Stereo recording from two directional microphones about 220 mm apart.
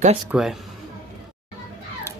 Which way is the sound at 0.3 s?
Centre (ahead or behind).